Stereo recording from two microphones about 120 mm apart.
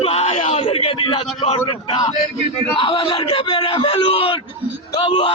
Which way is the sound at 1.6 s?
40° left (ahead or behind).